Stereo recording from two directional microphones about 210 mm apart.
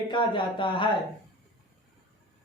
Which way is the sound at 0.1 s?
20° left (ahead or behind).